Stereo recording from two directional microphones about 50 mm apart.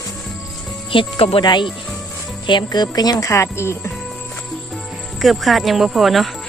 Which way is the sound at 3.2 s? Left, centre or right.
Left.